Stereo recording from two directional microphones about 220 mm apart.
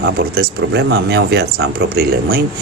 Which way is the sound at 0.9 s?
60° right (ahead or behind).